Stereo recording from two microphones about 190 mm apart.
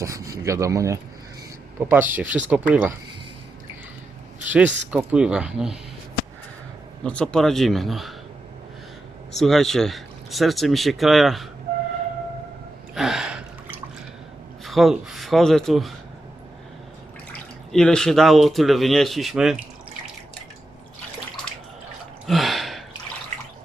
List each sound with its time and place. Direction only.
0.0 s speech: 15° right (ahead or behind)
4.4 s speech: 10° right (ahead or behind)
7.0 s speech: 5° left (ahead or behind)
9.4 s speech: centre (ahead or behind)
12.9 s gasp: centre (ahead or behind)
14.6 s speech: centre (ahead or behind)
17.3 s speech: 5° left (ahead or behind)
22.3 s gasp: centre (ahead or behind)